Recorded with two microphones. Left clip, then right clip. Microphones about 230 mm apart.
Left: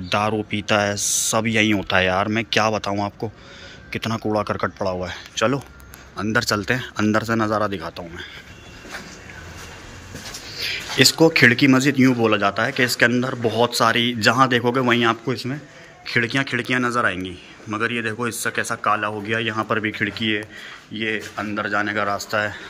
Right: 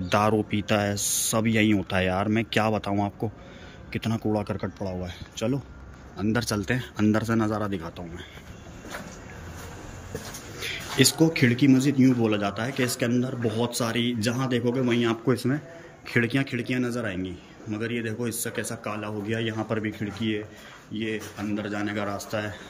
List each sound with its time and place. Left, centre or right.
0.1 s speech: centre
10.6 s speech: centre
15.2 s a man's voice: right